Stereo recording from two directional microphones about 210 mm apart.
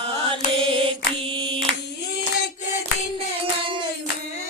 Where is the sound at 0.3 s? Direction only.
25° right (ahead or behind).